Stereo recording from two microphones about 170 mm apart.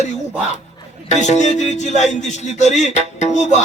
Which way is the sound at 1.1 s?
45° left (ahead or behind).